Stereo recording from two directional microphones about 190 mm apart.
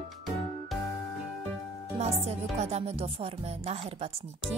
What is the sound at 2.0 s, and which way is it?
Speech, 35° right (ahead or behind).